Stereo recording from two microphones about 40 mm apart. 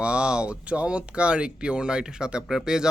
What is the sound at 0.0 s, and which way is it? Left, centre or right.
Speech, right.